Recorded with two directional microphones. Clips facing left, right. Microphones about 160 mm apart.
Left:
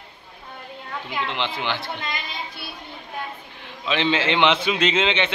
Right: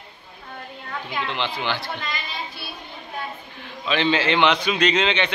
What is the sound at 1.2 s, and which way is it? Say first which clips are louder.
Speech: even; 20° left (ahead or behind).